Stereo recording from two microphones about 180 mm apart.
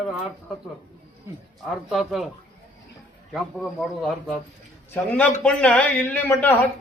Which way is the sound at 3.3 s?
Centre (ahead or behind).